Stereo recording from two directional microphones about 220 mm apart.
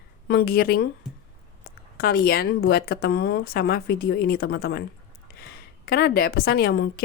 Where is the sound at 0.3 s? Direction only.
45° left (ahead or behind).